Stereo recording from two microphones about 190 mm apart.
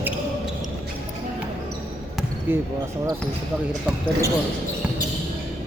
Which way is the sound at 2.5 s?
10° right (ahead or behind).